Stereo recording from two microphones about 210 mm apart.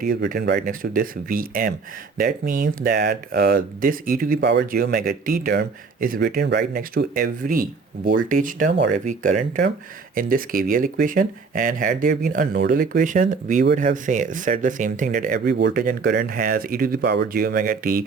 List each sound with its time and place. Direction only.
0.0 s speech: 40° right (ahead or behind)
4.4 s speech: 55° right (ahead or behind)